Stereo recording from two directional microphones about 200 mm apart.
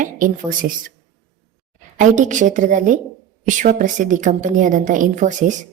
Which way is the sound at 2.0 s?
40° right (ahead or behind).